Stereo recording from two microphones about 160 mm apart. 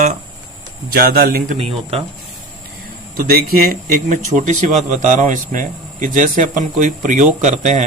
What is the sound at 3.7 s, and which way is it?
Speech, 50° right (ahead or behind).